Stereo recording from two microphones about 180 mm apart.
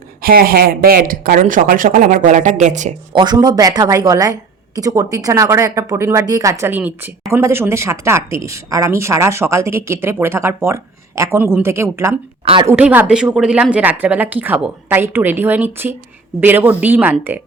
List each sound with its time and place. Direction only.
0.2 s speech: 55° right (ahead or behind)
3.1 s a woman's voice: 25° right (ahead or behind); by 17.4 s 10° right (ahead or behind)